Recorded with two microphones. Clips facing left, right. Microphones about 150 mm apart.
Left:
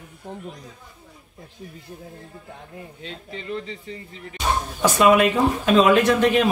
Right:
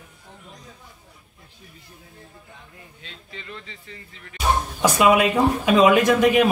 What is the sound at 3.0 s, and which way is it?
Speech, 35° left (ahead or behind).